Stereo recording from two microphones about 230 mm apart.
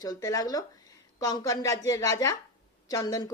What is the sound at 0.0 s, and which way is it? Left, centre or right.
A woman's voice, centre.